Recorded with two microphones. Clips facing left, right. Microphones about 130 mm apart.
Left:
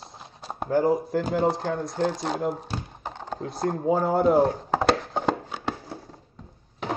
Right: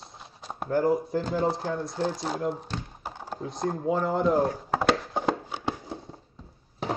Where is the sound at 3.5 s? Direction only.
5° left (ahead or behind).